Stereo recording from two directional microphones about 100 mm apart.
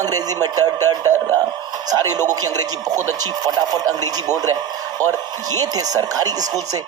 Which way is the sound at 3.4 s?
40° right (ahead or behind).